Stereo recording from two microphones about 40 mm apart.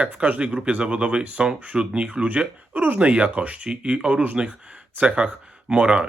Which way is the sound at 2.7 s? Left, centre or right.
Right.